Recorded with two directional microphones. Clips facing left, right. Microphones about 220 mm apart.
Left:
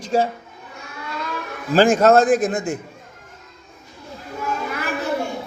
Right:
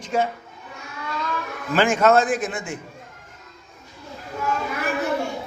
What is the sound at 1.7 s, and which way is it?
A man's voice, 35° left (ahead or behind).